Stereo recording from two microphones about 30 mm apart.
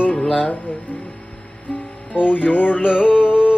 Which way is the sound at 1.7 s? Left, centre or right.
Left.